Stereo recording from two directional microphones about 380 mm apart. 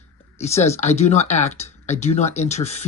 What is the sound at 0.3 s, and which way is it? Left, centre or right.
Speech, centre.